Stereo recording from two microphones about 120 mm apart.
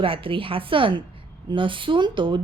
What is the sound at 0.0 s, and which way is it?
A woman's voice, 45° right (ahead or behind).